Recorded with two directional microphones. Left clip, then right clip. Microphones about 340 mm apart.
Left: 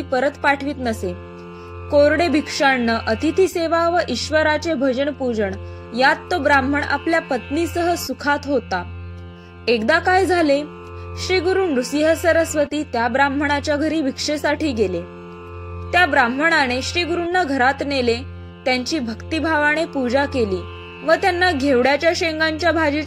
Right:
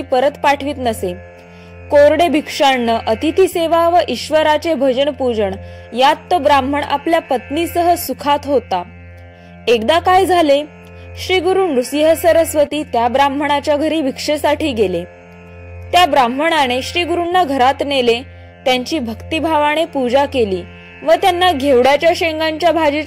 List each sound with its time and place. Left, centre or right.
0.1 s a woman's voice: centre